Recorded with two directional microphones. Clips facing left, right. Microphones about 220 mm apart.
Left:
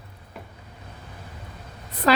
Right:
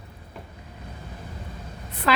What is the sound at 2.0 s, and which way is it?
Speech, 40° left (ahead or behind).